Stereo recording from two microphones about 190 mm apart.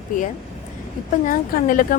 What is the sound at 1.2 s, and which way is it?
Speech, 45° left (ahead or behind).